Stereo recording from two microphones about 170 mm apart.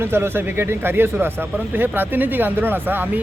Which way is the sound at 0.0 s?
15° right (ahead or behind).